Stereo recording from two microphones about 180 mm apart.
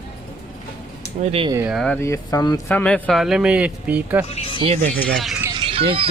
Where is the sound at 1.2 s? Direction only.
35° right (ahead or behind).